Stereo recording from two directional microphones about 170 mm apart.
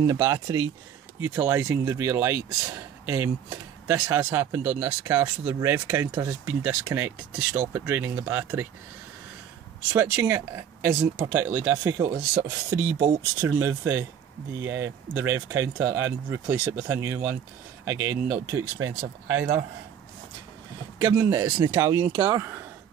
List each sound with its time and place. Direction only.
0.0 s speech: 20° right (ahead or behind)
9.9 s speech: 15° right (ahead or behind)
18.9 s speech: 90° right
21.0 s speech: 20° right (ahead or behind)